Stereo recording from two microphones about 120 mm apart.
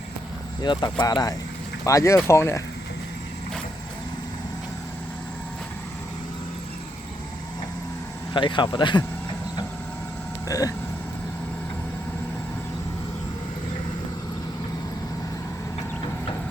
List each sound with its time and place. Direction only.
0.6 s speech: 40° left (ahead or behind)
8.3 s speech: 40° left (ahead or behind)
10.5 s speech: 30° left (ahead or behind)